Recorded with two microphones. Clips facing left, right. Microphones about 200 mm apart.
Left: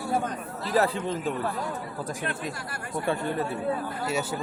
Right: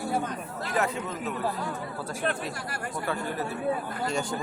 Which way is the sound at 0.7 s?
35° left (ahead or behind).